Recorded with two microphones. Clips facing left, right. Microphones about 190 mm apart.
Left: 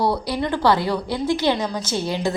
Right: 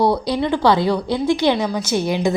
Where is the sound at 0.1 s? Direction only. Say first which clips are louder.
Right 4 dB; 15° right (ahead or behind).